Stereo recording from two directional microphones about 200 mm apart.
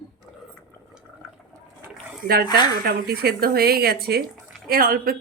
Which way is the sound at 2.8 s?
50° right (ahead or behind).